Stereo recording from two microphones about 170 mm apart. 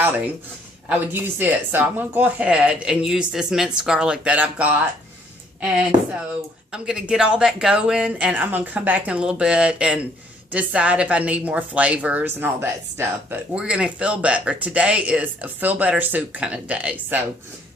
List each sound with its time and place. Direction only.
0.9 s a woman's voice: 10° right (ahead or behind)
6.7 s a woman's voice: 5° right (ahead or behind)